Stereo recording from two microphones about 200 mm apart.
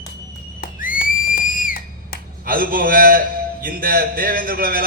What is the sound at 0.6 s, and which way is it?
Whistle, 45° left (ahead or behind).